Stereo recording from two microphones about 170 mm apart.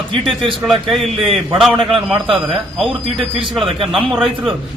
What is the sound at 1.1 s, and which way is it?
Speech, 35° right (ahead or behind).